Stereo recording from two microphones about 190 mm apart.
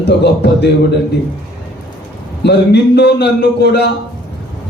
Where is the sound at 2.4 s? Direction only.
60° left (ahead or behind).